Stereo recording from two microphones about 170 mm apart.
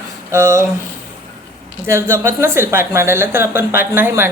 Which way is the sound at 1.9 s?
15° right (ahead or behind).